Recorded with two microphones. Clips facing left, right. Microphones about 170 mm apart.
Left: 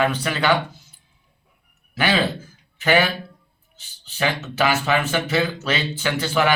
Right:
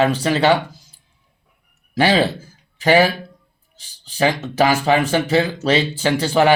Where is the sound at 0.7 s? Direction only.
10° right (ahead or behind).